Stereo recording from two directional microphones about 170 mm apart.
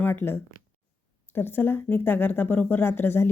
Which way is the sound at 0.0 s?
15° left (ahead or behind).